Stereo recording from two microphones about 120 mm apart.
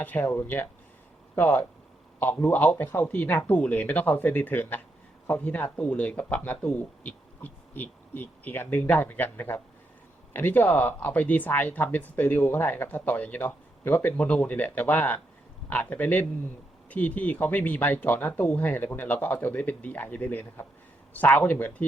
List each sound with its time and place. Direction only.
0.0 s speech: 15° left (ahead or behind)